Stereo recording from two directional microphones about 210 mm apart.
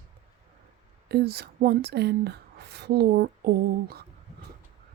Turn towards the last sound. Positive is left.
turn(degrees=-50)  # may be behind; listen again after turning